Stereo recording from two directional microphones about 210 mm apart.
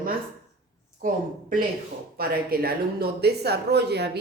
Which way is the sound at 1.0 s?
40° right (ahead or behind).